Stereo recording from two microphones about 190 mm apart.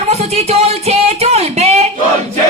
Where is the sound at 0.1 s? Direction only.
35° right (ahead or behind).